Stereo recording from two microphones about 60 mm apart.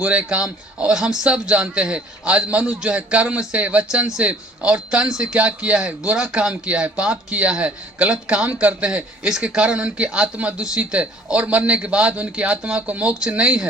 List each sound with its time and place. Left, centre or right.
0.0 s speech: right